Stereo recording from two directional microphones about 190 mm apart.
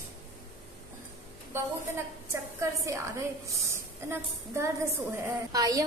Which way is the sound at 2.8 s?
15° right (ahead or behind).